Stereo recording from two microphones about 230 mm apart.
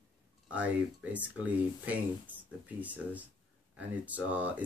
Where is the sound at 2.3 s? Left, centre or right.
Centre.